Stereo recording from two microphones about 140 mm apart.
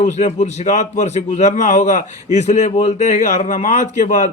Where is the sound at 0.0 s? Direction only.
55° left (ahead or behind).